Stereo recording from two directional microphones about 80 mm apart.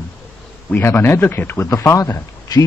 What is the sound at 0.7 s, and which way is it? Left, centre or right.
Speech, left.